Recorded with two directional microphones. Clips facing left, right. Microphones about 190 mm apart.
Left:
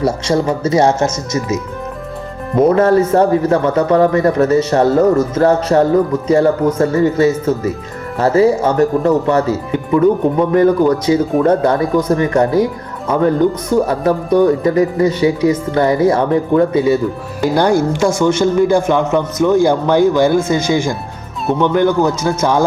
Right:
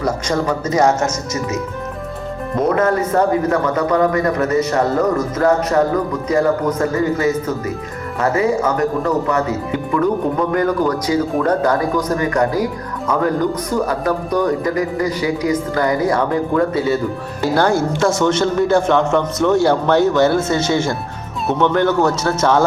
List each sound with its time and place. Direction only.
0.0 s speech: 25° left (ahead or behind)
2.7 s speech: 30° left (ahead or behind); by 22.6 s 10° left (ahead or behind)